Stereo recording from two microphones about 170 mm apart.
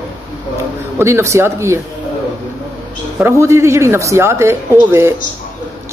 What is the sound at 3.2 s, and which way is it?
A man's voice, 15° right (ahead or behind).